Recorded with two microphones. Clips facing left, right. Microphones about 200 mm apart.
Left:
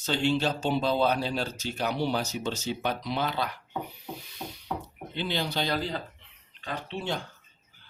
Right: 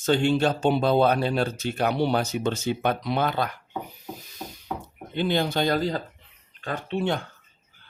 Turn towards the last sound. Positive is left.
turn(degrees=-55)  # may be behind; listen again after turning